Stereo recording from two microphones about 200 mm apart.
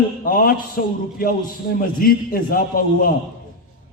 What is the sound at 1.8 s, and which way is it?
A man's voice, 45° left (ahead or behind).